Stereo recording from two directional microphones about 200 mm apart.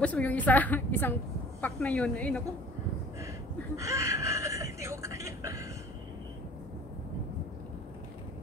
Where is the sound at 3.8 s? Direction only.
15° right (ahead or behind).